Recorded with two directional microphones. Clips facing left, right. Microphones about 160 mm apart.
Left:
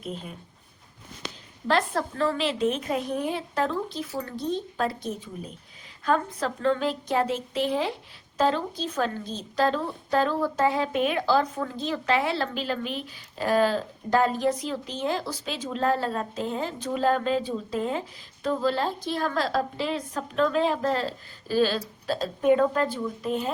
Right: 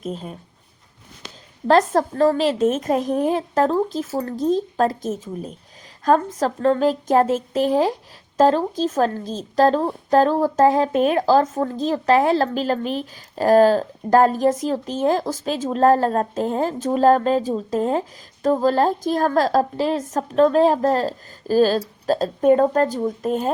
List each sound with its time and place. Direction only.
0.0 s a woman's voice: 40° right (ahead or behind)
1.6 s a woman's voice: 40° right (ahead or behind)